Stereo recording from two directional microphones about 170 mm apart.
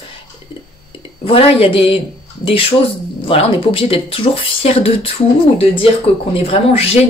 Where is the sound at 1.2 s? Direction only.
35° left (ahead or behind).